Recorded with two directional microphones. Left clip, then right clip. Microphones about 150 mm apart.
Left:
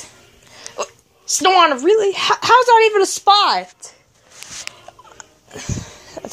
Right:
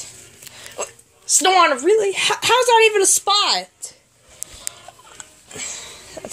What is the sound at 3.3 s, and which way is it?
Speech, 10° left (ahead or behind).